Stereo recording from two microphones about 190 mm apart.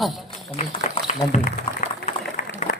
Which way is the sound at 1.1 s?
40° left (ahead or behind).